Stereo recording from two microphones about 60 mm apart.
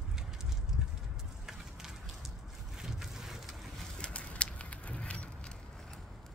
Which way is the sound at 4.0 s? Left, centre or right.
Centre.